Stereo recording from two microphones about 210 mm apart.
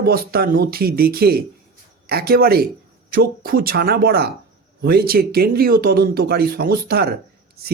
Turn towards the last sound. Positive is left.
turn(degrees=-50)  # may be behind; listen again after turning